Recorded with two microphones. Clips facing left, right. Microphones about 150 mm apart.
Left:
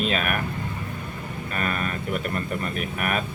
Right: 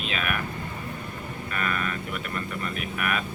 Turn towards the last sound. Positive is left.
turn(degrees=40)  # may be behind; listen again after turning